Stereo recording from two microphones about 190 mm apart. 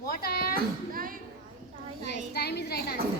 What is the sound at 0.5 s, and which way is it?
Speech, 50° right (ahead or behind).